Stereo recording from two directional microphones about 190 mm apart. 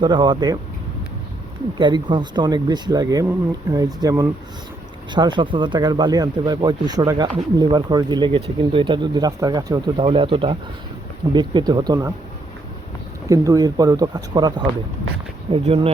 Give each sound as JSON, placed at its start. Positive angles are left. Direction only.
{"t": 0.0, "sound": "speech", "side_deg": -25}
{"t": 1.8, "sound": "speech", "side_deg": -25}
{"t": 13.2, "sound": "speech", "side_deg": -15}